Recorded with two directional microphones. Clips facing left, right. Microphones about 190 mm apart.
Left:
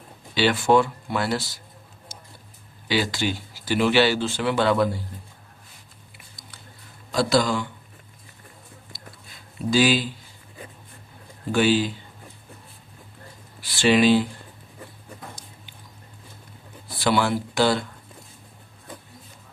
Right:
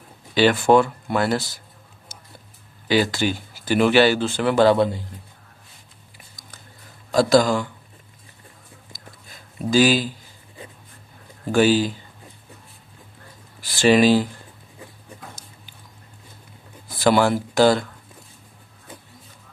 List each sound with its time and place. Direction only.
0.3 s speech: 50° right (ahead or behind)
2.8 s speech: 50° right (ahead or behind)
4.7 s speech: 25° right (ahead or behind)
7.1 s speech: 45° right (ahead or behind)
9.6 s speech: 45° right (ahead or behind)
11.5 s speech: 40° right (ahead or behind)
13.6 s speech: 45° right (ahead or behind)
17.0 s speech: 45° right (ahead or behind)